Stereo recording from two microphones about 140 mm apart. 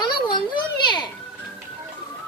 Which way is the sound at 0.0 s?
30° left (ahead or behind).